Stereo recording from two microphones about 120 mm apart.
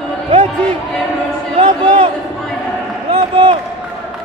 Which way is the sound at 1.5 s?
50° right (ahead or behind).